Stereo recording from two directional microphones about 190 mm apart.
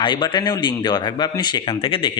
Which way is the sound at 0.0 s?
25° left (ahead or behind).